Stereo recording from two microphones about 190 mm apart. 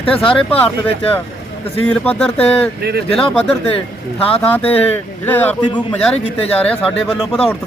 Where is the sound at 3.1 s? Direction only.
5° left (ahead or behind).